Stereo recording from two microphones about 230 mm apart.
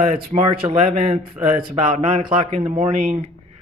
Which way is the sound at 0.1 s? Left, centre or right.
Right.